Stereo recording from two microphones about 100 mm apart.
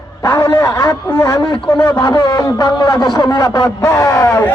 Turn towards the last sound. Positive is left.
turn(degrees=40)  # may be behind; listen again after turning